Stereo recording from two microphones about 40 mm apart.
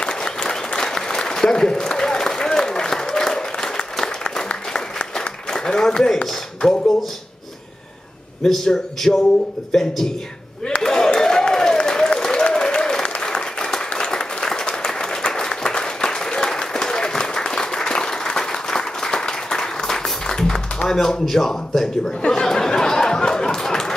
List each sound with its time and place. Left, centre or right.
0.0 s applause: centre
6.6 s speech: centre
8.5 s speech: centre
10.8 s a sound: centre
11.1 s applause: centre
20.9 s speech: centre
22.3 s a sound: centre